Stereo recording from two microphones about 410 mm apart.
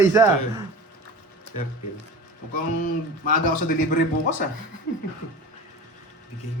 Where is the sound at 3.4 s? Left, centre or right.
Centre.